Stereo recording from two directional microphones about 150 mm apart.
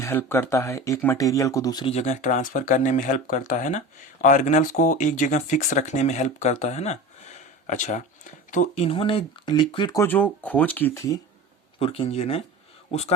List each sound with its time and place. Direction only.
0.0 s speech: 15° left (ahead or behind)
1.9 s speech: 50° left (ahead or behind)
8.7 s speech: 40° left (ahead or behind)
10.0 s speech: 10° left (ahead or behind)
11.8 s speech: 40° left (ahead or behind)